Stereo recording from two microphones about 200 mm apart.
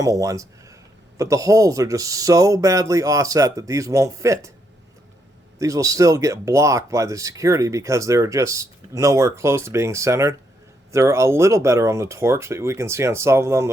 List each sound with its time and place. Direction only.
0.0 s speech: 15° right (ahead or behind)
5.5 s speech: 15° right (ahead or behind)